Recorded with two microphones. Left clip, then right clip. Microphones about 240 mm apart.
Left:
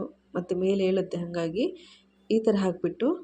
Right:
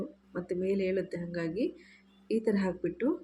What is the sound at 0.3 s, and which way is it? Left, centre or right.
Speech, centre.